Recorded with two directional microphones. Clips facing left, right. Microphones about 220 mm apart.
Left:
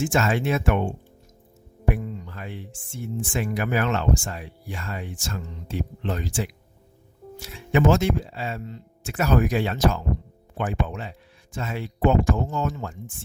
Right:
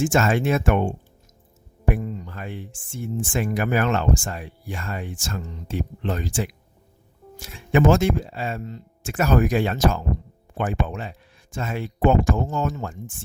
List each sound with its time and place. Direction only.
0.0 s speech: 50° right (ahead or behind)
1.9 s speech: 50° right (ahead or behind)